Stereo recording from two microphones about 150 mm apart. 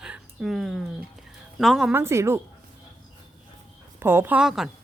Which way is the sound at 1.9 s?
15° right (ahead or behind).